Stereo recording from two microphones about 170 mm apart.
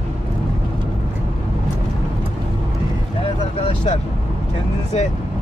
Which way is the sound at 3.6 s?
40° left (ahead or behind).